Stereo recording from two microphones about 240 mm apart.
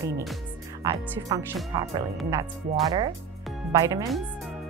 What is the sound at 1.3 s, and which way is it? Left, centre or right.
Speech, centre.